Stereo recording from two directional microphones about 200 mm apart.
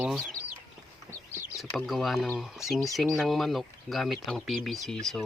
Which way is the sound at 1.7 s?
Centre (ahead or behind).